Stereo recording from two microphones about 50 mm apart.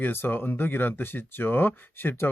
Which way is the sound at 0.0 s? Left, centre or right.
Left.